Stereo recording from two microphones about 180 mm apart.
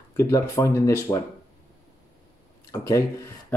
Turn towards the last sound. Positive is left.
turn(degrees=15)  # may be behind; listen again after turning